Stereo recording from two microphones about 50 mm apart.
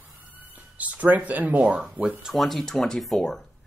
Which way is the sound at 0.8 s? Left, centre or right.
Right.